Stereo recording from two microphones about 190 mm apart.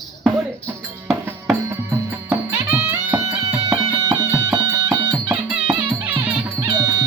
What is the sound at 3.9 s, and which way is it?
Music, 20° right (ahead or behind).